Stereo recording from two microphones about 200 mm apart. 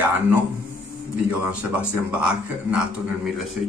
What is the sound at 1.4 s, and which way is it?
A man's voice, 5° right (ahead or behind).